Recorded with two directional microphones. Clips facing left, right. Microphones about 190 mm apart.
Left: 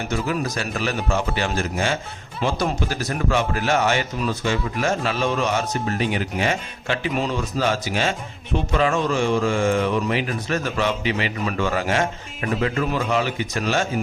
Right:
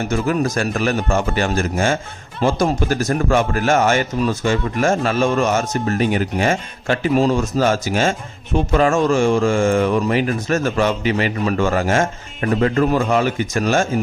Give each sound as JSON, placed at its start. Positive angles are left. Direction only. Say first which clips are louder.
{"t": 0.1, "sound": "a man's voice", "louder": "right 5 dB", "side_deg": -50}